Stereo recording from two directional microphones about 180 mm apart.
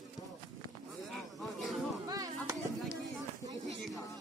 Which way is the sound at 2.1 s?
20° right (ahead or behind).